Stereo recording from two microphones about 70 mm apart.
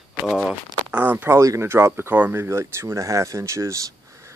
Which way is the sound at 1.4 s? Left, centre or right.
Right.